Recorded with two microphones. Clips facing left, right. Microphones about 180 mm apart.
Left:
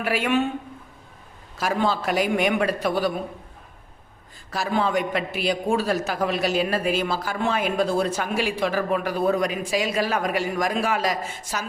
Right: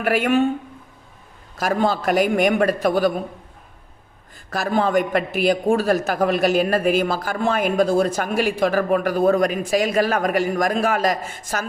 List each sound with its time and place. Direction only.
0.0 s a man's voice: 50° right (ahead or behind)
1.5 s a man's voice: 45° right (ahead or behind)
4.5 s a man's voice: 50° right (ahead or behind)